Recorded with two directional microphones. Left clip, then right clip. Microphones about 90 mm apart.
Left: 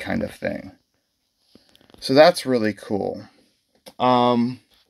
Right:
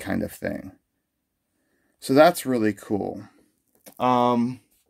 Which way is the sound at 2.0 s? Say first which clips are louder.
Left 3 dB; 5° left (ahead or behind).